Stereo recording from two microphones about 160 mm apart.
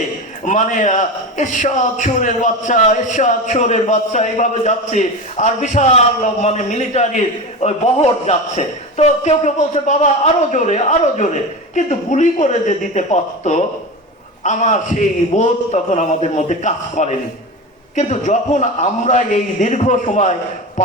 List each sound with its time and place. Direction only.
0.4 s a man's voice: 50° left (ahead or behind)